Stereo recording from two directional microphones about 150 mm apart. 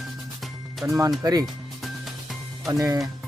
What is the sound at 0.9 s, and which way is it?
Speech, 20° right (ahead or behind).